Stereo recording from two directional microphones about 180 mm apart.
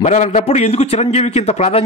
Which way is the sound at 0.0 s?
40° left (ahead or behind).